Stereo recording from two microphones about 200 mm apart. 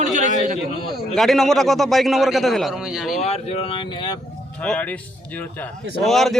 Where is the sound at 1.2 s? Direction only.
Centre (ahead or behind).